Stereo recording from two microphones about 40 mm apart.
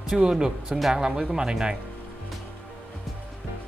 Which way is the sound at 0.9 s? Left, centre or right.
Centre.